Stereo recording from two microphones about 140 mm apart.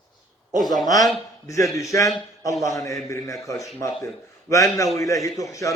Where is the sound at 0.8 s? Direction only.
25° left (ahead or behind).